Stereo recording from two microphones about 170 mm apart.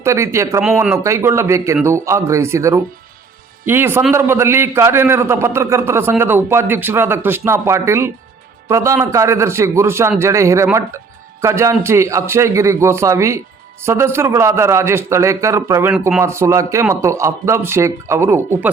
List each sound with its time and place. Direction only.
0.0 s a man's voice: 15° right (ahead or behind)